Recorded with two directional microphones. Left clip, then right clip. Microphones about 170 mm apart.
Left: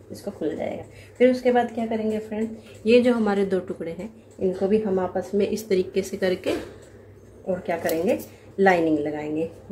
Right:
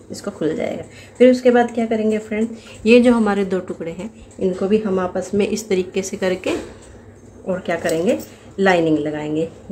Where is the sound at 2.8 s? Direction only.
15° right (ahead or behind).